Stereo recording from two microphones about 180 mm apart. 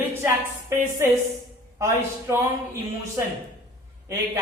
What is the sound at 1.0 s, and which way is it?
Speech, 15° right (ahead or behind).